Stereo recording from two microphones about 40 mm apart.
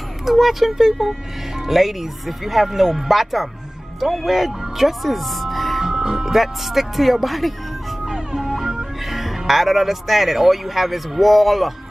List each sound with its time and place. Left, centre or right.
0.2 s speech: centre
5.9 s music: centre
6.3 s speech: centre
8.1 s speech: centre